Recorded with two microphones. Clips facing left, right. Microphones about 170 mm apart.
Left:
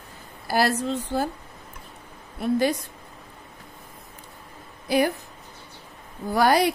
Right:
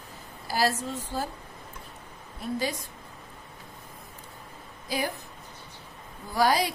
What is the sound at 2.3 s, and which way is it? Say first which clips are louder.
Speech: left 8 dB; 60° left (ahead or behind).